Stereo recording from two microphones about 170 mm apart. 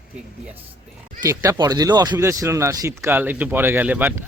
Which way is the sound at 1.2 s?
20° right (ahead or behind).